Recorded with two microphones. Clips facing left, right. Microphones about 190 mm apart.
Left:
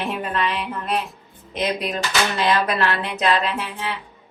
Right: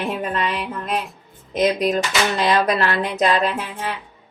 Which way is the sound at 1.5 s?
45° right (ahead or behind).